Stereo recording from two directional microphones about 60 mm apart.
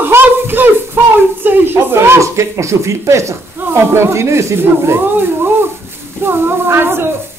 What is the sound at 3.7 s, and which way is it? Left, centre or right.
A woman's voice, right.